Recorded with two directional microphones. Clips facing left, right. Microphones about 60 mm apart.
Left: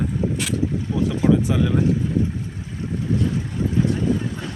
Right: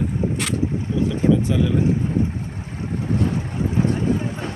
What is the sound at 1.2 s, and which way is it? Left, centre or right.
Speech, centre.